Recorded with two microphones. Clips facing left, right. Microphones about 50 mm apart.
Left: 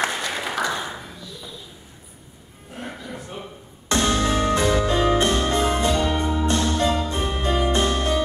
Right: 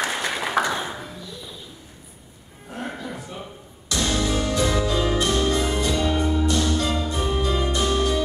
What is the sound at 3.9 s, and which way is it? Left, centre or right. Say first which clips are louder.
Music: left 3 dB; left.